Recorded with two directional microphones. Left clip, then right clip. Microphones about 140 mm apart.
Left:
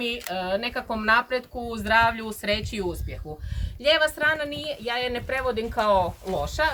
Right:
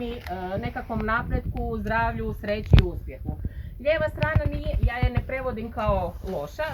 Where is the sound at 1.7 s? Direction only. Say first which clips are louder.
Left 6 dB; 55° left (ahead or behind).